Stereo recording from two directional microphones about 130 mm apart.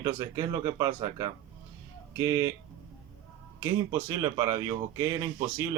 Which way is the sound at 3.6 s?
20° right (ahead or behind).